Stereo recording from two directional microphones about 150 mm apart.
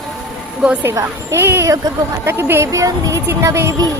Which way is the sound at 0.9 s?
15° right (ahead or behind).